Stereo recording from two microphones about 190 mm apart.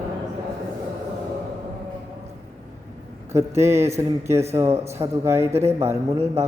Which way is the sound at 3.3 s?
15° right (ahead or behind).